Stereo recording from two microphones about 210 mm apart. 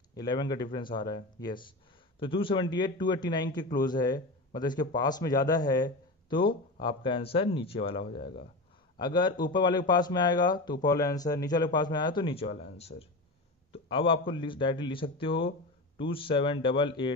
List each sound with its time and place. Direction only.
0.1 s a man's voice: 20° left (ahead or behind)
13.7 s a man's voice: 25° left (ahead or behind)